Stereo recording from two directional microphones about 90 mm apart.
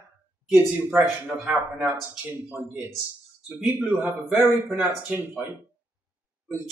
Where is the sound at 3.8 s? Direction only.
20° right (ahead or behind).